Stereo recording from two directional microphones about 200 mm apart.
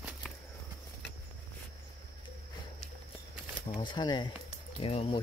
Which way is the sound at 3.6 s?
25° left (ahead or behind).